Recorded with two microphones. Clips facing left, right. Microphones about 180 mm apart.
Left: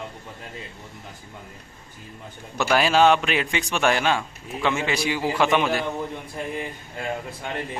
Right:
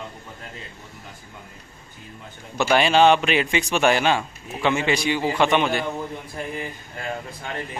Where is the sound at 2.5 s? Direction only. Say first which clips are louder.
Right 2 dB; centre (ahead or behind).